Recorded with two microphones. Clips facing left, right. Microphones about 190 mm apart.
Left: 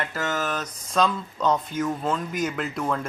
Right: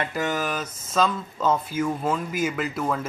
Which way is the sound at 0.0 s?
15° right (ahead or behind).